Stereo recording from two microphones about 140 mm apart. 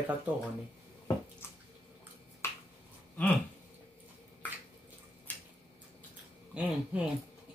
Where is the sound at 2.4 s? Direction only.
20° left (ahead or behind).